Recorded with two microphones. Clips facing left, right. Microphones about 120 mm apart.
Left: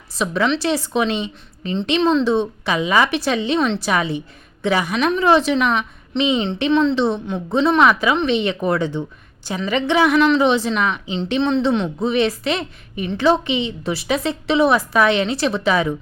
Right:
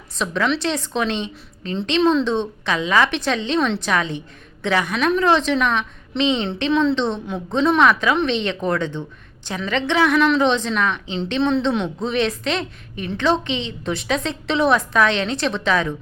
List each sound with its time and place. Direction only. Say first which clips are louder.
0.2 s a woman's voice: left 2 dB; 5° left (ahead or behind)
2.2 s a woman's voice: left 3 dB; 10° left (ahead or behind)